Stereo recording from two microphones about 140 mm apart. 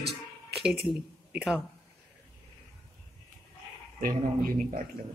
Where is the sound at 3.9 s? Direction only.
85° right.